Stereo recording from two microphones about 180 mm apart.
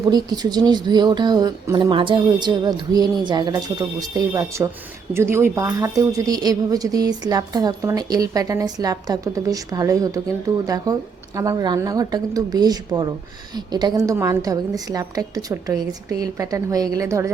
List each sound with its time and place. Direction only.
0.1 s a woman's voice: 20° right (ahead or behind)
11.3 s a woman's voice: 20° right (ahead or behind)